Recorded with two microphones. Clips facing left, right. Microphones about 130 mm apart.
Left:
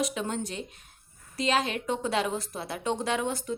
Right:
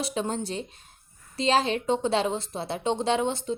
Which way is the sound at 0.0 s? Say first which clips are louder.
Right 1 dB; 30° right (ahead or behind).